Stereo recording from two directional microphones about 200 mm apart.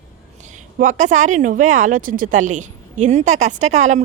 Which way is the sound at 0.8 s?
40° right (ahead or behind).